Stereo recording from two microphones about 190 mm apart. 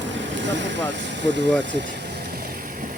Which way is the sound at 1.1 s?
70° right (ahead or behind).